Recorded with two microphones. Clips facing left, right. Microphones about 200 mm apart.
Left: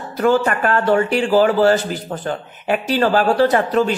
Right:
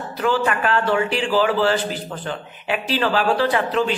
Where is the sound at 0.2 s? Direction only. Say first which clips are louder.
Left 4 dB; 45° left (ahead or behind).